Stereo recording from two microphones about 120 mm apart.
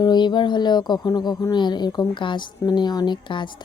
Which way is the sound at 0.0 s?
35° left (ahead or behind).